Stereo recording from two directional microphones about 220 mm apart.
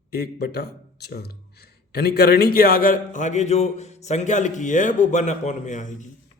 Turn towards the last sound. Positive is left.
turn(degrees=35)  # may be behind; listen again after turning